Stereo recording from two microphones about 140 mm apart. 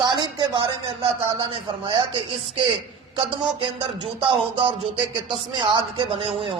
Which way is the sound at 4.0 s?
35° right (ahead or behind).